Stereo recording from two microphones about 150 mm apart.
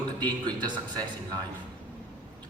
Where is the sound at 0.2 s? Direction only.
30° right (ahead or behind).